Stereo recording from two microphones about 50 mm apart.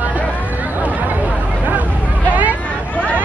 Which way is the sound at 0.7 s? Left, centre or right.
Right.